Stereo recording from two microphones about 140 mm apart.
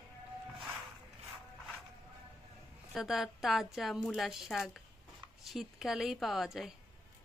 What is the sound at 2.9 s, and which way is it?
A woman's voice, centre (ahead or behind).